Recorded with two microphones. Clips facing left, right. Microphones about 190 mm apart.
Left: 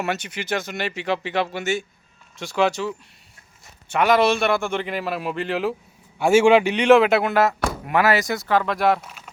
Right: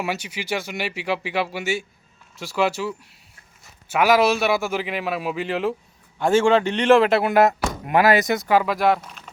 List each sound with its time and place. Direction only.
0.0 s a man's voice: 10° right (ahead or behind)
7.3 s speech: 15° right (ahead or behind); by 9.3 s 5° left (ahead or behind)